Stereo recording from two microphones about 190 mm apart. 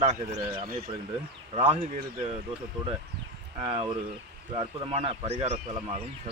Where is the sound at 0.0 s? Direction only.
35° right (ahead or behind).